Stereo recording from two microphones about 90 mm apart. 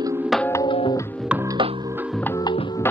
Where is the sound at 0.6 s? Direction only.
65° left (ahead or behind).